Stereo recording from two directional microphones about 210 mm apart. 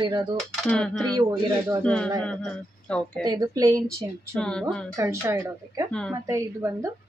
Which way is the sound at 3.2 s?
20° right (ahead or behind).